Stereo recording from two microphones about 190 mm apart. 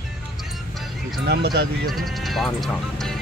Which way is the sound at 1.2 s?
60° right (ahead or behind).